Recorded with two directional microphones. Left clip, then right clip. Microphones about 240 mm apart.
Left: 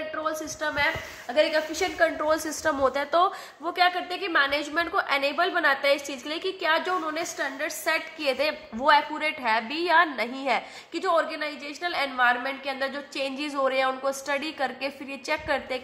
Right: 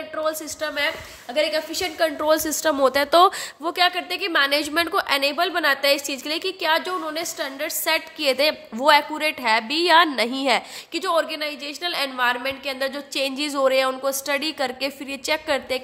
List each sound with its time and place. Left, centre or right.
0.1 s a woman's voice: right